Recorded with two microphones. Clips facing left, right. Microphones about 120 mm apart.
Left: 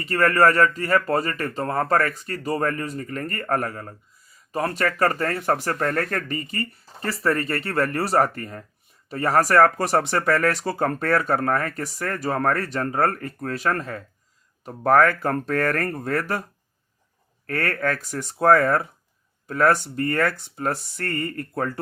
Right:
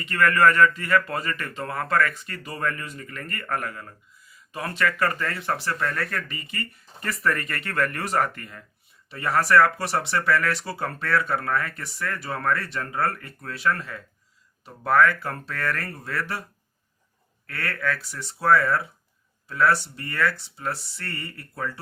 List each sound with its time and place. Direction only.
0.0 s speech: 40° left (ahead or behind)
17.4 s speech: 45° left (ahead or behind)